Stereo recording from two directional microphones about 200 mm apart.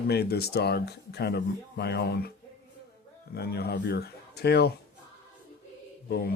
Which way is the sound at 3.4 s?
55° left (ahead or behind).